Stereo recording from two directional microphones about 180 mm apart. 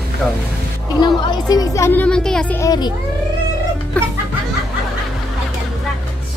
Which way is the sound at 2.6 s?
20° left (ahead or behind).